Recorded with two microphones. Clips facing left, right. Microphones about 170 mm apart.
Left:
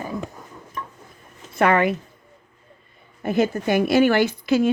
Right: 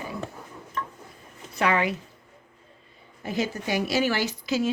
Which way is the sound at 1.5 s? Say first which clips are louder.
Left 6 dB; 55° left (ahead or behind).